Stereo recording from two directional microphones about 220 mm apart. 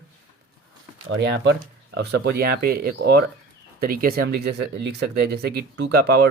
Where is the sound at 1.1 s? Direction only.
50° right (ahead or behind).